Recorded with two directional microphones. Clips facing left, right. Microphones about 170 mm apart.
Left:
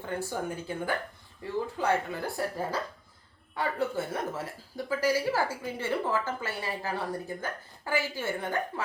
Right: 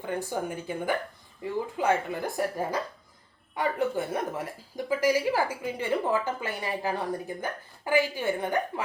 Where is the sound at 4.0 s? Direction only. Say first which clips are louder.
Right 2 dB; 15° right (ahead or behind).